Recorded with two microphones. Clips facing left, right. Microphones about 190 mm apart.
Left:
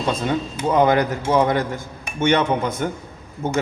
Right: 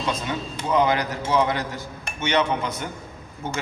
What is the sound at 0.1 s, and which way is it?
A man's voice, 50° left (ahead or behind).